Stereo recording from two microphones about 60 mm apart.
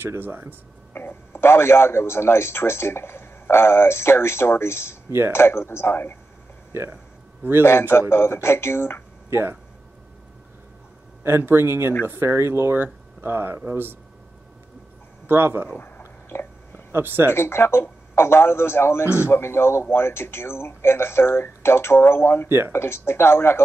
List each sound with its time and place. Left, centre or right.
0.0 s speech: right
0.9 s speech: left
6.7 s speech: right
8.1 s speech: left
9.3 s speech: right
11.2 s speech: right
15.2 s speech: right
16.0 s a sound: left
16.9 s speech: right
17.3 s speech: left